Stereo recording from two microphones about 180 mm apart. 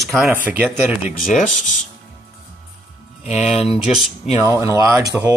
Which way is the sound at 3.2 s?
40° left (ahead or behind).